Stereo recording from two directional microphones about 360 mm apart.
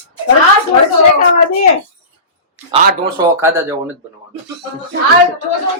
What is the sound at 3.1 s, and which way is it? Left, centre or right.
Speech, centre.